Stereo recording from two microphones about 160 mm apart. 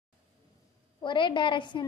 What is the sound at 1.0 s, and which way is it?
Speech, 30° left (ahead or behind).